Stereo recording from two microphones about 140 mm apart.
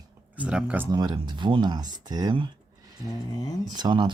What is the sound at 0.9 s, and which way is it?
Speech, 30° right (ahead or behind).